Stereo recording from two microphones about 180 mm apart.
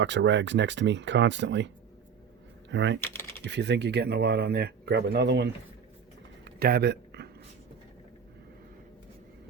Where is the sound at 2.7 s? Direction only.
90° right.